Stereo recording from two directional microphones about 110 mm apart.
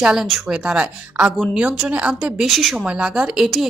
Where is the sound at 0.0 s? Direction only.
5° right (ahead or behind).